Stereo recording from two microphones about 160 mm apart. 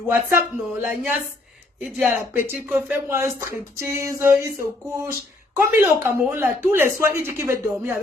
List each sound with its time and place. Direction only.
0.1 s speech: 15° right (ahead or behind)